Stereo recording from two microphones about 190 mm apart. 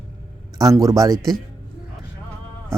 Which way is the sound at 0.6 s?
15° right (ahead or behind).